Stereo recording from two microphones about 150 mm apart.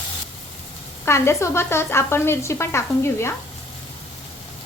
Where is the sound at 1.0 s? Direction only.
15° left (ahead or behind).